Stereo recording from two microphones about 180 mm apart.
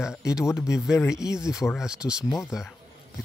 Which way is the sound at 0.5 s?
15° left (ahead or behind).